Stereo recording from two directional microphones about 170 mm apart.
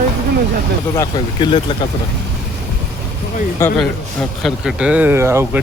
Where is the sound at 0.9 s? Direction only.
25° left (ahead or behind).